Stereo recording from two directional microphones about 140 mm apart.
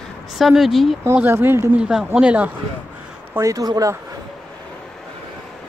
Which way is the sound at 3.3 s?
25° right (ahead or behind).